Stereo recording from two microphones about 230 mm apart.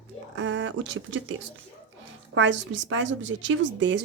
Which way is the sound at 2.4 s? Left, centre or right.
Right.